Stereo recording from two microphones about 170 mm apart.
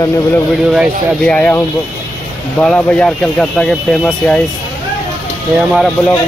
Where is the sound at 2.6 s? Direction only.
5° left (ahead or behind).